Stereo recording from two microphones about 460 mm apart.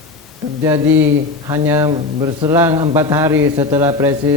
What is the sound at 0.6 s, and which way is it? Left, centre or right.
Speech, centre.